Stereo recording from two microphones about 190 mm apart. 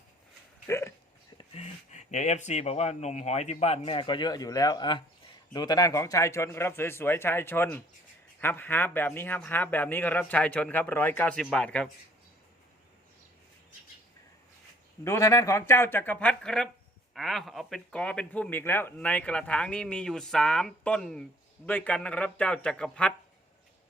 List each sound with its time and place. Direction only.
0.7 s dog: 15° left (ahead or behind)
1.5 s a man's voice: 35° left (ahead or behind); by 11.9 s 5° left (ahead or behind)
15.0 s a man's voice: 15° left (ahead or behind)